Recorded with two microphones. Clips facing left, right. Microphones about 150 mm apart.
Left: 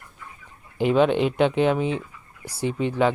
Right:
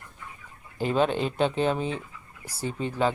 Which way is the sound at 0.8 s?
15° left (ahead or behind).